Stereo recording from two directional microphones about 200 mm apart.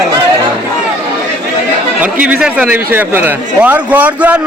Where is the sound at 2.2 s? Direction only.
5° right (ahead or behind).